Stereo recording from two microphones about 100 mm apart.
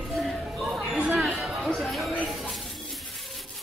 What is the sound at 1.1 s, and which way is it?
Chatter, centre (ahead or behind).